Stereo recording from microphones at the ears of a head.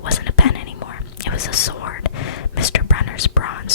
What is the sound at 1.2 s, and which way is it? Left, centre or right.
Whispering, left.